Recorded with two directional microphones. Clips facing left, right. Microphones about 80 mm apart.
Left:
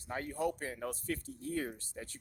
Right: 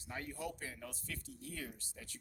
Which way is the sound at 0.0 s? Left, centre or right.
Left.